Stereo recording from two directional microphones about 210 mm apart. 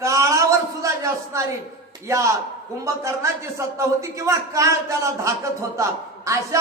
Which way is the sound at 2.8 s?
15° right (ahead or behind).